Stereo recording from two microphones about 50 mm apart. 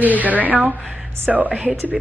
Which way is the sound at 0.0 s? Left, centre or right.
Right.